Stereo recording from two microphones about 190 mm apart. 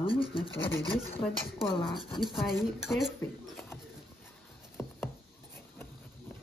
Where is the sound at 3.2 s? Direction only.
10° left (ahead or behind).